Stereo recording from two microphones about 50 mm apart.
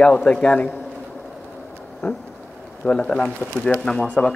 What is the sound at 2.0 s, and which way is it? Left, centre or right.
Speech, left.